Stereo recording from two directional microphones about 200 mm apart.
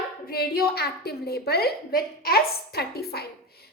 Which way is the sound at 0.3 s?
50° left (ahead or behind).